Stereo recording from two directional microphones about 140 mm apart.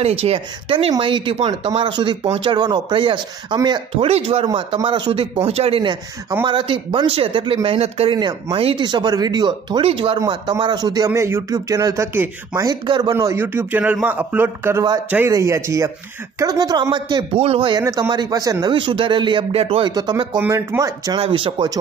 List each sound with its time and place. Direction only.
0.0 s speech: 45° right (ahead or behind)
3.9 s speech: 40° right (ahead or behind)
8.2 s speech: 30° right (ahead or behind)
11.1 s speech: 20° right (ahead or behind)
12.6 s speech: 30° right (ahead or behind)
13.1 s a man's voice: 20° right (ahead or behind); by 17.8 s 35° right (ahead or behind)
17.8 s speech: 25° right (ahead or behind); by 19.9 s 45° right (ahead or behind)
19.9 s speech: 30° right (ahead or behind)
20.3 s speech: 15° right (ahead or behind)
21.2 s speech: 40° right (ahead or behind)